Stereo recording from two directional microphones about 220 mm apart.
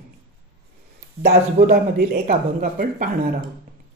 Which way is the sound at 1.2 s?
45° right (ahead or behind).